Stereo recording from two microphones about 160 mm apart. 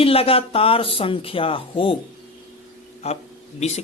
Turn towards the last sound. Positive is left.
turn(degrees=40)  # may be behind; listen again after turning